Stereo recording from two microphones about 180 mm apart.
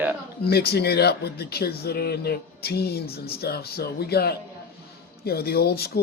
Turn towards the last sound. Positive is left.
turn(degrees=60)  # may be behind; listen again after turning